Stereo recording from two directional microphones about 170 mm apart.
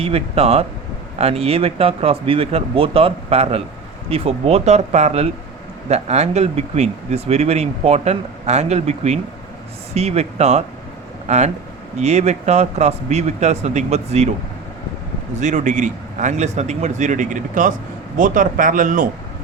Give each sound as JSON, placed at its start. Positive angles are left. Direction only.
{"t": 0.0, "sound": "speech", "side_deg": -35}
{"t": 15.4, "sound": "a man's voice", "side_deg": -45}